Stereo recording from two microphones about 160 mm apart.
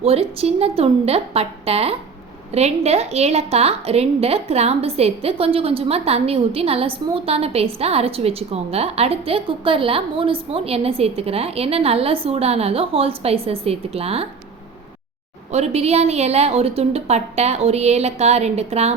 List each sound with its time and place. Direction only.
0.0 s a woman's voice: 40° right (ahead or behind)
15.5 s a woman's voice: 40° right (ahead or behind)